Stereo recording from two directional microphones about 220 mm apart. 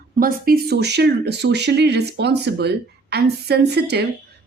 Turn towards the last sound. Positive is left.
turn(degrees=-50)  # may be behind; listen again after turning